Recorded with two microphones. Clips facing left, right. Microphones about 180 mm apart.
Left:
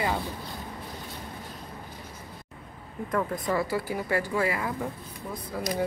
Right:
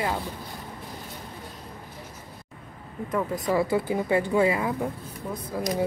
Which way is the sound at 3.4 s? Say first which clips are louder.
Right 4 dB; 20° right (ahead or behind).